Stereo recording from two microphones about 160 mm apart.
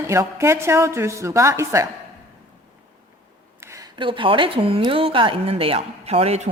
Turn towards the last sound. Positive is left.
turn(degrees=-45)  # may be behind; listen again after turning